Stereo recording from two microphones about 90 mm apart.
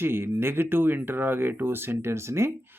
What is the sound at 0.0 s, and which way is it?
Speech, 25° right (ahead or behind).